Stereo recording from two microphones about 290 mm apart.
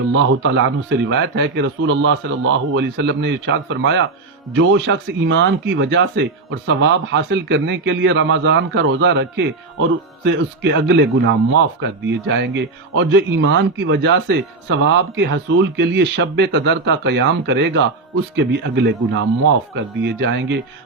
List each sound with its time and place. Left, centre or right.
0.1 s a man's voice: right